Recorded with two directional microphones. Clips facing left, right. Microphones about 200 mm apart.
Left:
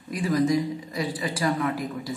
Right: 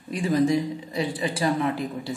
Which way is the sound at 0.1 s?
25° right (ahead or behind).